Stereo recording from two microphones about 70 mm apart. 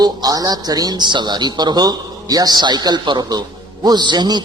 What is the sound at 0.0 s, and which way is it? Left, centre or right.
A man's voice, right.